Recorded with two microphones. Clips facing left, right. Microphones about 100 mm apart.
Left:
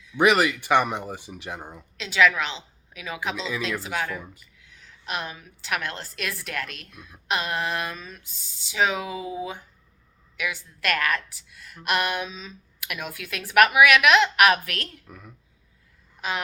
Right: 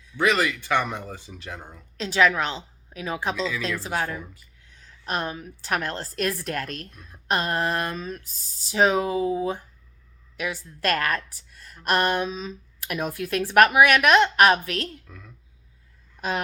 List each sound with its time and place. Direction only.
0.2 s speech: 15° left (ahead or behind)
2.0 s a woman's voice: 35° right (ahead or behind)
3.3 s speech: 20° left (ahead or behind)
3.8 s a woman's voice: 35° right (ahead or behind)
15.0 s speech: 15° left (ahead or behind)